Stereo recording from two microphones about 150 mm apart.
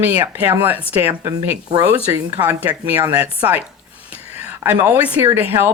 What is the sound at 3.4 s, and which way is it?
Speech, 10° right (ahead or behind).